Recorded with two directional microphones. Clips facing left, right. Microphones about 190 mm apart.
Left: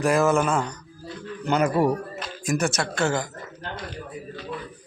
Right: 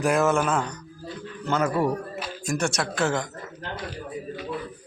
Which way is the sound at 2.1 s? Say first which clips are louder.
Right 1 dB; 5° right (ahead or behind).